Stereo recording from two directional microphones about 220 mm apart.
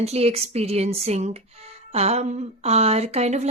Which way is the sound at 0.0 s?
30° right (ahead or behind).